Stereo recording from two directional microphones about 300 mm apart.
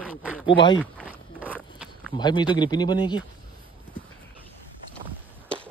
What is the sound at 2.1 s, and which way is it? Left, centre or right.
Speech, centre.